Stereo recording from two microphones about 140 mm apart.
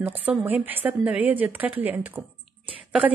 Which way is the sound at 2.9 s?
10° right (ahead or behind).